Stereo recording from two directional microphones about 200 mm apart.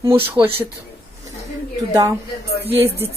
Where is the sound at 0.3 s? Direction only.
10° right (ahead or behind).